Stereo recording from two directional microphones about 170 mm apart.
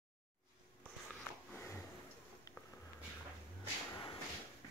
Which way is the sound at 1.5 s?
15° left (ahead or behind).